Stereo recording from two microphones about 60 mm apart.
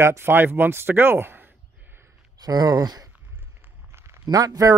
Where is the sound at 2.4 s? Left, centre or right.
Right.